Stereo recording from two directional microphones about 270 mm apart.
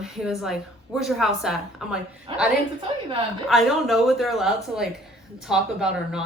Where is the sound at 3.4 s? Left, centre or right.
Centre.